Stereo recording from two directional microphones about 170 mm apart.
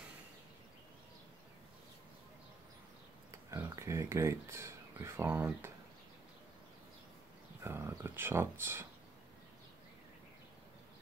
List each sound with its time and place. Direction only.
3.3 s speech: 15° right (ahead or behind)
7.6 s speech: 15° right (ahead or behind)